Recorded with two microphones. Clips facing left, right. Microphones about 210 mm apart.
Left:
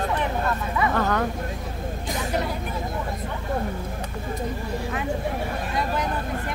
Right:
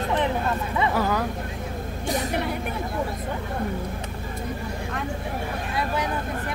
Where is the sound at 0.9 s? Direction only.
5° right (ahead or behind).